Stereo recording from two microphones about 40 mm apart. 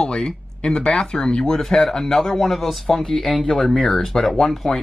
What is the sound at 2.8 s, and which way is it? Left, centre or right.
Speech, centre.